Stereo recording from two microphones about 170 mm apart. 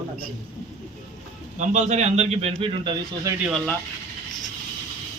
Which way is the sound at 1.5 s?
45° right (ahead or behind).